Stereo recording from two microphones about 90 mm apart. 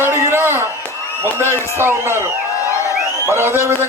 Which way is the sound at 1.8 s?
25° right (ahead or behind).